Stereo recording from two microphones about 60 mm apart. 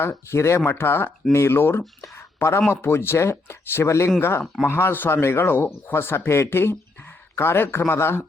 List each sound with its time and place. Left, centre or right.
0.3 s speech: left